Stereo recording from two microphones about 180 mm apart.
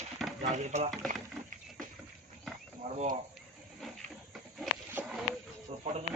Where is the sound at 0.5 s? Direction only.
40° right (ahead or behind).